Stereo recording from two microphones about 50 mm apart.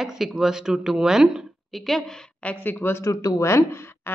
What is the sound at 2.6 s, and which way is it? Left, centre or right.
Speech, left.